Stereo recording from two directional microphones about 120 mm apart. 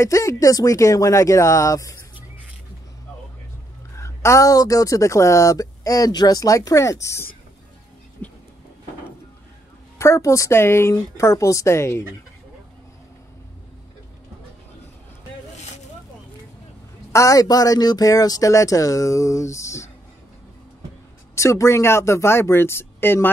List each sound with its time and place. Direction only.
0.0 s speech: 25° left (ahead or behind)
3.9 s speech: 25° left (ahead or behind)
8.2 s vehicle: 15° left (ahead or behind)
9.9 s speech: 25° left (ahead or behind)
17.1 s speech: 30° left (ahead or behind)
21.4 s speech: 25° left (ahead or behind)